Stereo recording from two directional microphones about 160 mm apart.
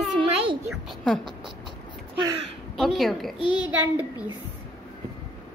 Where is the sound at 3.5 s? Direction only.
10° right (ahead or behind).